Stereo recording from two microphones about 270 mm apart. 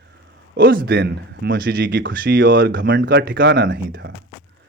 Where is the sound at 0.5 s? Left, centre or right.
Right.